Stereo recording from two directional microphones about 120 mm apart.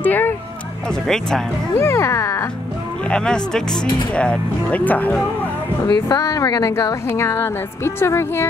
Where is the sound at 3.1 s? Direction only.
5° left (ahead or behind).